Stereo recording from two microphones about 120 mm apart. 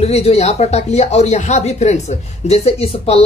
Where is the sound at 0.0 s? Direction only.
60° left (ahead or behind).